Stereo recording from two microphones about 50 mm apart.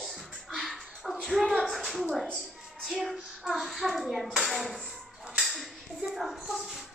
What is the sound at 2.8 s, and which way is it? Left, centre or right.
A child's voice, centre.